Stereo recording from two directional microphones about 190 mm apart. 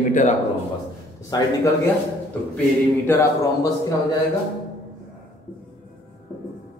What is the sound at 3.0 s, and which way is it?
Speech, 15° left (ahead or behind).